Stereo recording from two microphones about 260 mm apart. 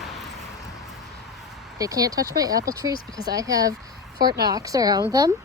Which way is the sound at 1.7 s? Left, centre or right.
Centre.